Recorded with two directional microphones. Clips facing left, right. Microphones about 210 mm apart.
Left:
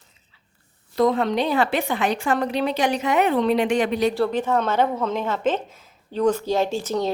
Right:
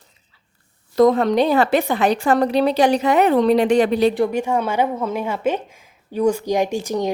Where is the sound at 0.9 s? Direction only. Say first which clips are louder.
Right 5 dB; 45° right (ahead or behind).